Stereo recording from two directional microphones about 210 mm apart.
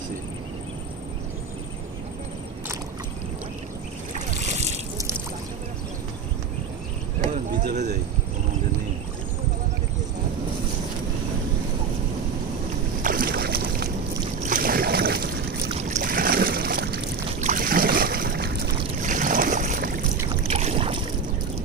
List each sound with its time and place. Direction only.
4.1 s boat: 35° right (ahead or behind)
7.6 s a sound: 40° right (ahead or behind)
13.0 s boat: 40° right (ahead or behind)
15.7 s boat: 35° right (ahead or behind)